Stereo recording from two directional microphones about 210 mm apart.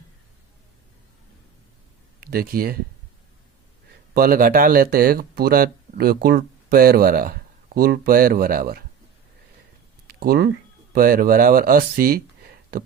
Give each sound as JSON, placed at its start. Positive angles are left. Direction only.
{"t": 2.2, "sound": "speech", "side_deg": -45}
{"t": 4.1, "sound": "speech", "side_deg": -45}
{"t": 10.1, "sound": "speech", "side_deg": -45}